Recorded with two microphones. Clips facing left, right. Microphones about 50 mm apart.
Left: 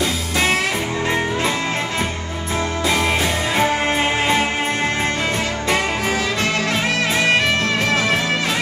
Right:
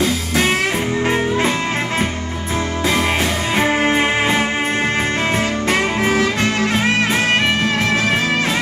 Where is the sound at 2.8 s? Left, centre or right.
Right.